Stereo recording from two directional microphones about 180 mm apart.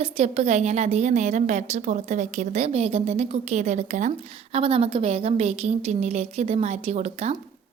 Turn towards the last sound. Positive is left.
turn(degrees=-40)  # may be behind; listen again after turning